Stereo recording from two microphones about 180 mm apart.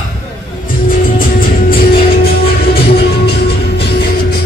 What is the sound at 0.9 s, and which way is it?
Music, 50° left (ahead or behind).